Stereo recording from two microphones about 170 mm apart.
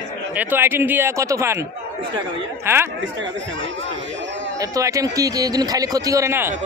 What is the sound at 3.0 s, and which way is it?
Speech, 90° right.